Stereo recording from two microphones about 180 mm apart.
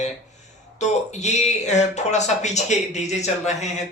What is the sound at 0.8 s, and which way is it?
Speech, 40° left (ahead or behind).